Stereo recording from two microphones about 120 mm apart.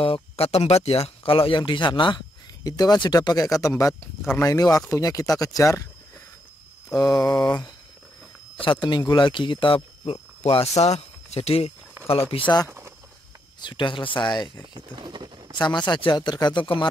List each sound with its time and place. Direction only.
0.0 s speech: 55° left (ahead or behind); by 5.9 s 25° left (ahead or behind)
7.0 s speech: 30° left (ahead or behind)
8.6 s speech: 40° left (ahead or behind)
10.4 s speech: 55° left (ahead or behind)
12.6 s a sound: 20° right (ahead or behind)
13.6 s speech: 40° left (ahead or behind)
14.7 s speech: 40° right (ahead or behind)
15.5 s speech: 40° left (ahead or behind)